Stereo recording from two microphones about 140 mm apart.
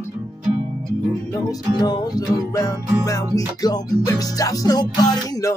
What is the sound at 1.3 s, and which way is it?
Music, 25° left (ahead or behind).